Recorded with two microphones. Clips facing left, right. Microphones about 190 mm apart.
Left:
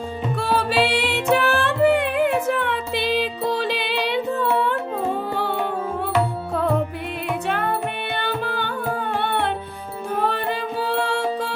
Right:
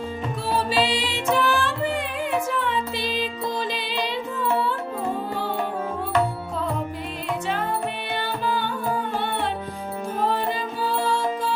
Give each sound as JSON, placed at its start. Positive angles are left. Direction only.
{"t": 0.3, "sound": "music", "side_deg": 70}
{"t": 7.4, "sound": "music", "side_deg": 60}